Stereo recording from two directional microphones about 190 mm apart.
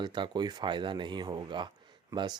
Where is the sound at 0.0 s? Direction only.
25° right (ahead or behind).